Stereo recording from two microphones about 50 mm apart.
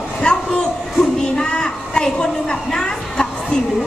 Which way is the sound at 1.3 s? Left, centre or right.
Centre.